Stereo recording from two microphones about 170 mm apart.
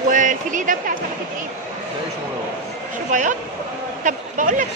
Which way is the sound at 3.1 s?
50° right (ahead or behind).